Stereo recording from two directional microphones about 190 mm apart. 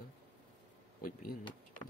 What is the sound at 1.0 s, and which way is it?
Speech, 45° left (ahead or behind).